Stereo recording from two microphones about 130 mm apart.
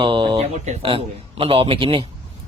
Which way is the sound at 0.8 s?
45° right (ahead or behind).